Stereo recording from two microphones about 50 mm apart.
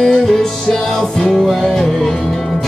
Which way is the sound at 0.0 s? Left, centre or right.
Centre.